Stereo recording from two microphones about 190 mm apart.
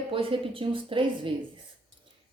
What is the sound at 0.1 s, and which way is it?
Speech, 30° right (ahead or behind).